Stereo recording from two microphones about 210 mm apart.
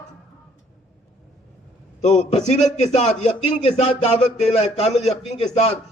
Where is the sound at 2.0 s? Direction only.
30° left (ahead or behind).